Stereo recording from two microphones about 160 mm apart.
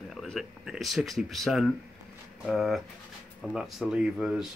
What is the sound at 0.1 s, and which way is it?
Speech, centre (ahead or behind).